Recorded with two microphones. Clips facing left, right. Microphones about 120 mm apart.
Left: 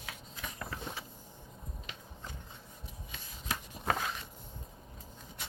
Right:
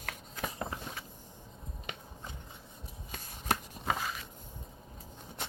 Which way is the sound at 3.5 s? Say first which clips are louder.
Right 7 dB; 65° right (ahead or behind).